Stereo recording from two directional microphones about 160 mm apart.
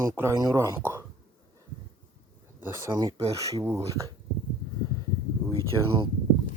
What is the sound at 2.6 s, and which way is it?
A man's voice, 15° right (ahead or behind).